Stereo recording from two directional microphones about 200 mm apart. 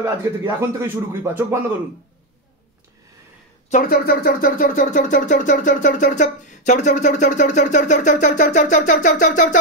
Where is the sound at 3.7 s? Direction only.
50° left (ahead or behind).